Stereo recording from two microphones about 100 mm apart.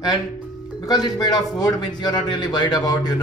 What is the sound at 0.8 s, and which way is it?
A man's voice, 40° left (ahead or behind).